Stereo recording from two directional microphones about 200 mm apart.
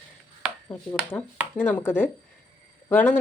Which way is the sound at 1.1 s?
15° left (ahead or behind).